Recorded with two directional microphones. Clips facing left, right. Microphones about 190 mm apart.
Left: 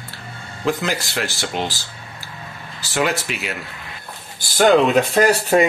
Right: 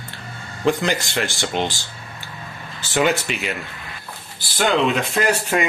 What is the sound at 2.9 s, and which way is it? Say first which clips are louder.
Speech: right 2 dB; centre (ahead or behind).